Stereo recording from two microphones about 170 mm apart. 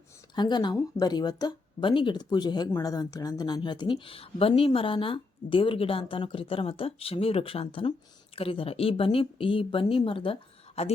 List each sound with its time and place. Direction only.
0.3 s speech: 25° left (ahead or behind)